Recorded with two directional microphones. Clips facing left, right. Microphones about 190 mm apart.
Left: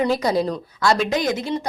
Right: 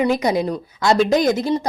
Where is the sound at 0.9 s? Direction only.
35° right (ahead or behind).